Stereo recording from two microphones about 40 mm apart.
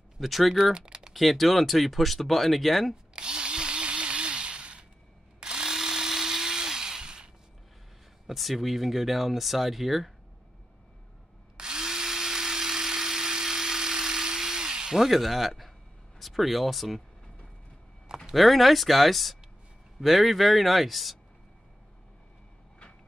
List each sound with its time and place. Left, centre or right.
0.2 s speech: centre
0.7 s typing: right
1.1 s speech: centre
3.2 s drill: right
5.4 s drill: centre
8.3 s speech: centre
11.5 s drill: centre
15.0 s speech: centre
18.0 s a sound: centre
18.3 s speech: centre